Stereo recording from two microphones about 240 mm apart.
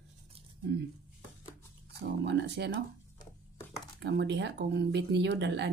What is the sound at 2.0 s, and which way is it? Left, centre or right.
Speech, right.